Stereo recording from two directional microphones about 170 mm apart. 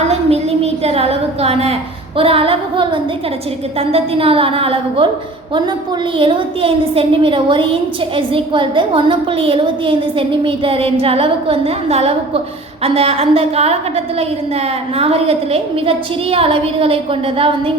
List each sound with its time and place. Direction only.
0.1 s a sound: 40° right (ahead or behind)
2.1 s a woman's voice: 35° right (ahead or behind)
6.1 s a woman's voice: 30° right (ahead or behind)